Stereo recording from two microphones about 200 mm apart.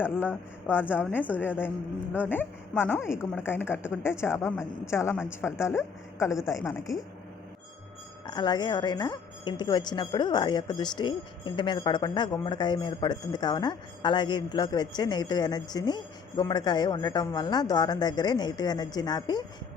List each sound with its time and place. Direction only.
0.0 s a woman's voice: 10° left (ahead or behind)
8.3 s speech: 20° left (ahead or behind)